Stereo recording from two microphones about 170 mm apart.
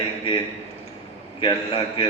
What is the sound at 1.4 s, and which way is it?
Speech, 30° left (ahead or behind).